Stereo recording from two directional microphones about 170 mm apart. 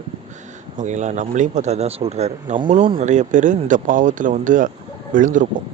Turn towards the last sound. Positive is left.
turn(degrees=-50)  # may be behind; listen again after turning